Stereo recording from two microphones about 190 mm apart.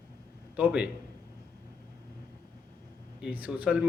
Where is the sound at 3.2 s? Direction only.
5° right (ahead or behind).